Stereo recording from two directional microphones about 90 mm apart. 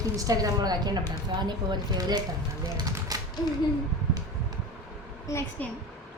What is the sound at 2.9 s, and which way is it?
Typewriter, 40° right (ahead or behind).